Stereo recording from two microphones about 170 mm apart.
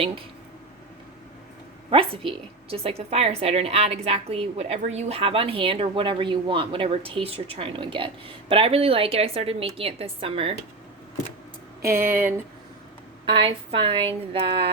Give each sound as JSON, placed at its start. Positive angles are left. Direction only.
{"t": 1.9, "sound": "a woman's voice", "side_deg": -30}
{"t": 11.9, "sound": "speech", "side_deg": -15}
{"t": 13.2, "sound": "a woman's voice", "side_deg": -30}